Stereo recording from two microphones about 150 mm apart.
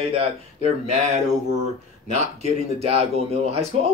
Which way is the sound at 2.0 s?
50° right (ahead or behind).